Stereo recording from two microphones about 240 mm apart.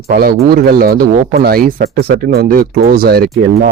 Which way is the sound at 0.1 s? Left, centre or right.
Right.